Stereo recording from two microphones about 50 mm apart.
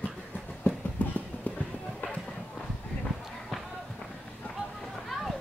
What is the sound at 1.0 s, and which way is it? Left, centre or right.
Clip-clop, left.